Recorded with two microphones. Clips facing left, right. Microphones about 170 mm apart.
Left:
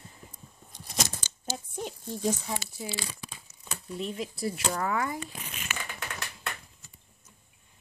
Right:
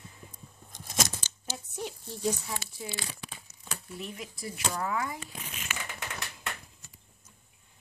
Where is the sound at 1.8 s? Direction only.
50° left (ahead or behind).